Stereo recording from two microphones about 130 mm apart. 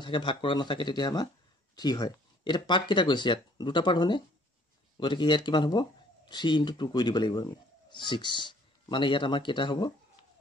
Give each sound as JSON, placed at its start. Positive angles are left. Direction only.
{"t": 0.0, "sound": "speech", "side_deg": 40}